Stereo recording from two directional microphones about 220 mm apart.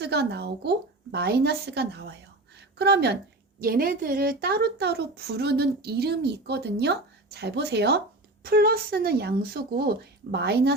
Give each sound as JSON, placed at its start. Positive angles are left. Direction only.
{"t": 0.0, "sound": "a woman's voice", "side_deg": -50}